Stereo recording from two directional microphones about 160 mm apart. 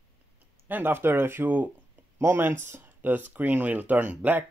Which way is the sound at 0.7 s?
15° right (ahead or behind).